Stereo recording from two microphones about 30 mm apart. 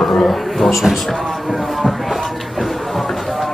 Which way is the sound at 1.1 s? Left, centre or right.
Centre.